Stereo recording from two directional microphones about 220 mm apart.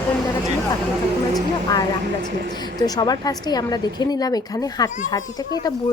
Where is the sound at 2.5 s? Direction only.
20° left (ahead or behind).